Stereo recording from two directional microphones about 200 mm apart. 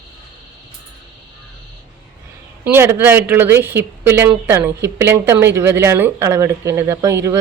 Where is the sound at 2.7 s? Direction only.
10° right (ahead or behind).